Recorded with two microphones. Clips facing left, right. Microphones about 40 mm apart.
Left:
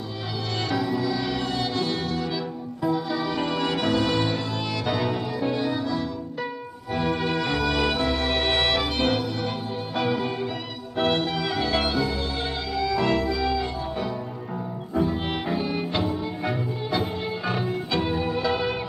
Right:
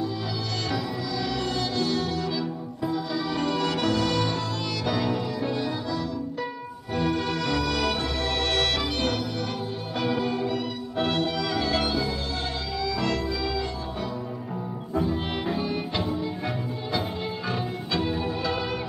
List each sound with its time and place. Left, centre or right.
0.7 s music: centre
2.8 s music: centre
11.0 s music: centre
13.0 s organ: centre
15.0 s music: centre